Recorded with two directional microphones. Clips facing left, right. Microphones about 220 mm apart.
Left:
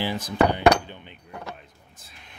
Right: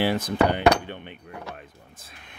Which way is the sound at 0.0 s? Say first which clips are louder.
Right 1 dB; 65° right (ahead or behind).